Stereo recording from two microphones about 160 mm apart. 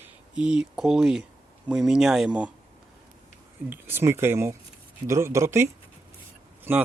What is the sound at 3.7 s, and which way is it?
Speech, 15° right (ahead or behind).